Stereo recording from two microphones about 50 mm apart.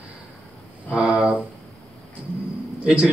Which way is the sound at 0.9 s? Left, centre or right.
Centre.